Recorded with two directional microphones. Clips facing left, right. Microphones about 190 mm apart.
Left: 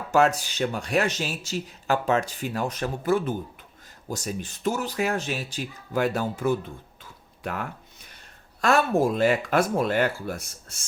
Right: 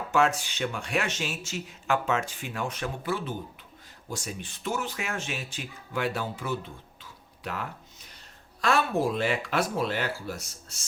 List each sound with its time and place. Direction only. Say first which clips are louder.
0.1 s speech: left 4 dB; 40° left (ahead or behind)